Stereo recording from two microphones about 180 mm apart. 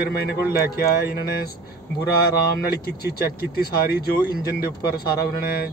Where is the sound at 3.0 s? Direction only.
55° left (ahead or behind).